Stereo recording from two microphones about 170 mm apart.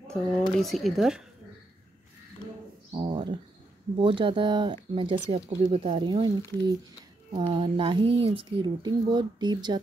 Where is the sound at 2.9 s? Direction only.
25° right (ahead or behind).